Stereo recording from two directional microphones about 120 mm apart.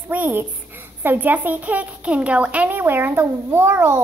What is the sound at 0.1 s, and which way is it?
A child's voice, 15° right (ahead or behind).